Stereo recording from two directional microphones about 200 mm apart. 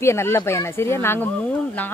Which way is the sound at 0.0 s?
15° left (ahead or behind).